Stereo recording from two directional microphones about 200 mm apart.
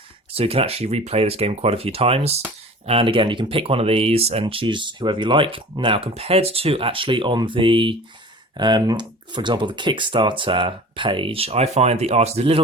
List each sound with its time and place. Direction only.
0.3 s speech: 30° right (ahead or behind)